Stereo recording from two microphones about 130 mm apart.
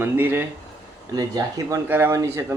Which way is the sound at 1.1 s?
30° right (ahead or behind).